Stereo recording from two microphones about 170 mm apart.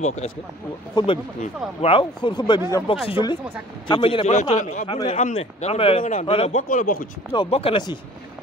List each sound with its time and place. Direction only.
0.0 s a man's voice: 40° left (ahead or behind)
4.8 s a man's voice: 35° left (ahead or behind)
6.7 s speech: 55° left (ahead or behind)
7.3 s speech: 35° left (ahead or behind)